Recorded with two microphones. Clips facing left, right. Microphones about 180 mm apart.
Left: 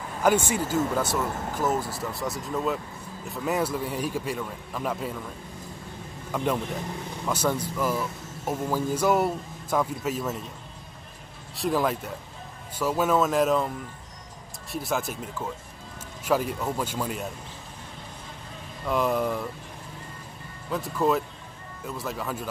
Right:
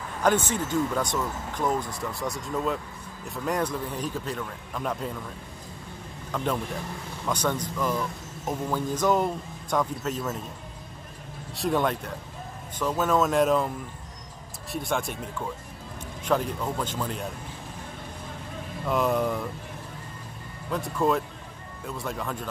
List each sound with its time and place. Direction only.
0.2 s speech: 10° left (ahead or behind)
6.3 s speech: 5° left (ahead or behind)
11.5 s speech: centre (ahead or behind)
14.7 s speech: 5° left (ahead or behind)
18.9 s speech: centre (ahead or behind)
20.7 s speech: centre (ahead or behind)